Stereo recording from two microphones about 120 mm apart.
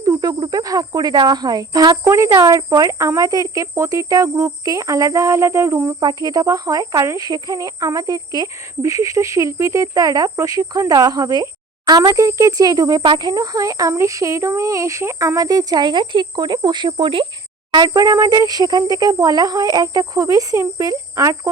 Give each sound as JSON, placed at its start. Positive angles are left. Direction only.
{"t": 0.0, "sound": "cricket", "side_deg": -30}
{"t": 6.0, "sound": "cricket", "side_deg": -35}
{"t": 11.9, "sound": "speech", "side_deg": -30}